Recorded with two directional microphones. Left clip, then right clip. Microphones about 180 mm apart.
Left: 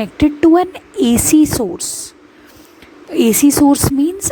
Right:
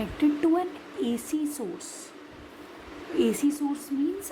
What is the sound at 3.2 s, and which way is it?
Speech, 60° left (ahead or behind).